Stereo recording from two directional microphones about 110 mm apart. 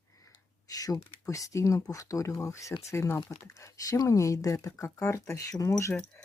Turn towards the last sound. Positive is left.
turn(degrees=25)  # may be behind; listen again after turning